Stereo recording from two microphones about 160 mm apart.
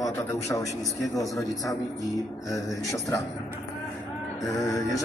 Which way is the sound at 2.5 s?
20° left (ahead or behind).